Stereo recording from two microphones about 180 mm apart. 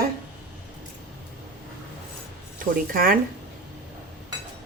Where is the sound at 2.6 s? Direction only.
50° right (ahead or behind).